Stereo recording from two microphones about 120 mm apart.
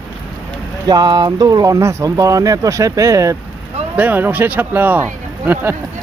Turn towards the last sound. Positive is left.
turn(degrees=-15)  # may be behind; listen again after turning